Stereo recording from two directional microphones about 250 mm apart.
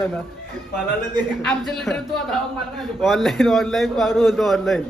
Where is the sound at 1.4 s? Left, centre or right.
Centre.